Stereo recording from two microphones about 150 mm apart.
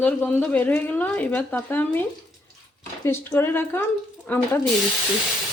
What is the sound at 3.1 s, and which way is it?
Speech, 15° left (ahead or behind).